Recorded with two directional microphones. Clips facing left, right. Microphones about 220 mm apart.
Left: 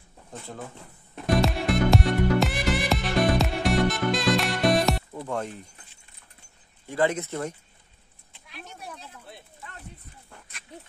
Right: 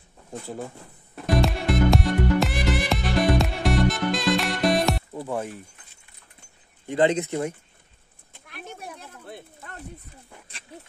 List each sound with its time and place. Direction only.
0.3 s speech: 10° right (ahead or behind)
1.2 s music: centre (ahead or behind)
5.1 s speech: 5° right (ahead or behind)
6.9 s speech: 20° right (ahead or behind)
8.3 s a sound: 55° right (ahead or behind)